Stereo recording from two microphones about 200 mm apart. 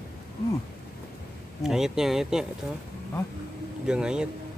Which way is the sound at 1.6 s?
Centre (ahead or behind).